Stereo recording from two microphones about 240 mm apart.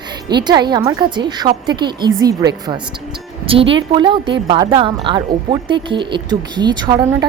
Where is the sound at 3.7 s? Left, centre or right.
Right.